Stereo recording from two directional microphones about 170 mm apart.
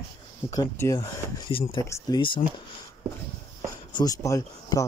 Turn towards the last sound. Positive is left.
turn(degrees=20)  # may be behind; listen again after turning